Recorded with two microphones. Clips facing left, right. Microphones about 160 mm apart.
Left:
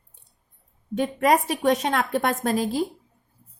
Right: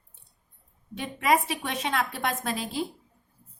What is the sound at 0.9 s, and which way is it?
A woman's voice, 45° left (ahead or behind).